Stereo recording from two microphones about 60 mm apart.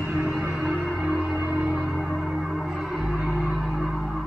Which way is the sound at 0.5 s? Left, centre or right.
Centre.